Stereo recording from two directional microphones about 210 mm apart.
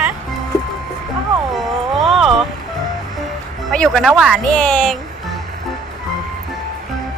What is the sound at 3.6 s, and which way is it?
Speech, centre (ahead or behind).